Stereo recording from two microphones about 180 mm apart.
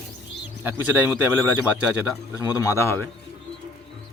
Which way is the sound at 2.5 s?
15° left (ahead or behind).